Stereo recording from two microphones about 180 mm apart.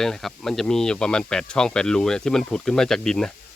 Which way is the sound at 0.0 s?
Centre (ahead or behind).